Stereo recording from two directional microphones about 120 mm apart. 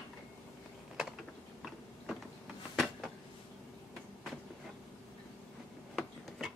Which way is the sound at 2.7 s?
Centre (ahead or behind).